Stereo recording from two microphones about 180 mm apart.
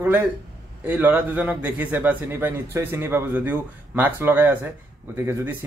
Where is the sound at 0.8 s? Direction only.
10° right (ahead or behind).